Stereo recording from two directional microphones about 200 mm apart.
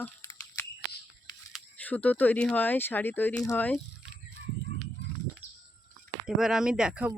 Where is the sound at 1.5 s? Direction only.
10° left (ahead or behind).